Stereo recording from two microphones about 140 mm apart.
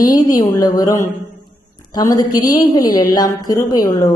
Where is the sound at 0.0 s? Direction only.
25° left (ahead or behind).